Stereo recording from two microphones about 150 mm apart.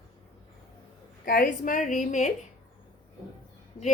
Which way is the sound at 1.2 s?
65° left (ahead or behind).